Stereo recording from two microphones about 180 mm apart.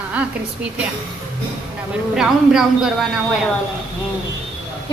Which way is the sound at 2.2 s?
5° right (ahead or behind).